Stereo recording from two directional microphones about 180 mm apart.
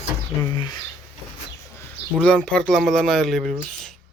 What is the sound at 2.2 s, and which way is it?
Speech, 5° left (ahead or behind).